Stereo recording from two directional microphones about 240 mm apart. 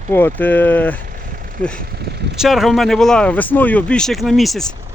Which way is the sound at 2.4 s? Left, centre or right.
Centre.